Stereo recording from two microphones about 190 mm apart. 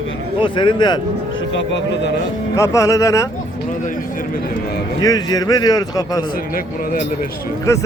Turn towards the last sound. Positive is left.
turn(degrees=50)  # may be behind; listen again after turning